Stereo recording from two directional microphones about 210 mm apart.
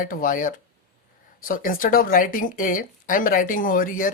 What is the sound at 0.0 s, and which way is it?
Speech, 40° left (ahead or behind).